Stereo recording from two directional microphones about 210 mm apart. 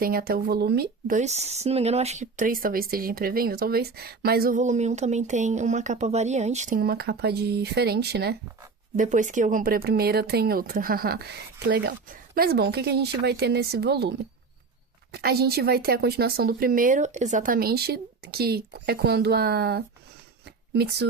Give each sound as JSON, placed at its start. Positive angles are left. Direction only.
{"t": 0.0, "sound": "speech", "side_deg": -45}
{"t": 9.0, "sound": "speech", "side_deg": -35}